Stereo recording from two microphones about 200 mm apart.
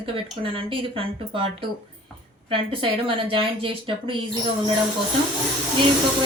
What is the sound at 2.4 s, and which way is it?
Speech, 25° right (ahead or behind).